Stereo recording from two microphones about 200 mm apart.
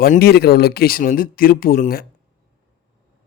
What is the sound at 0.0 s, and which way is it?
Speech, 50° left (ahead or behind).